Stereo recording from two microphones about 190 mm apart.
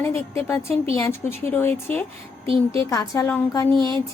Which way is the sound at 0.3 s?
15° left (ahead or behind).